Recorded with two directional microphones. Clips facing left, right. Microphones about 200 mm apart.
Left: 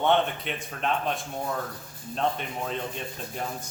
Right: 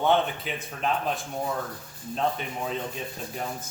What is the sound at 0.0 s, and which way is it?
Speech, centre (ahead or behind).